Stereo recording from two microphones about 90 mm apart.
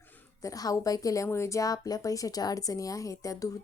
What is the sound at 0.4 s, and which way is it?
A woman's voice, 40° left (ahead or behind).